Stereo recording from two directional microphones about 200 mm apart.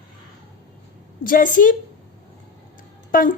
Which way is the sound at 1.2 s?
45° left (ahead or behind).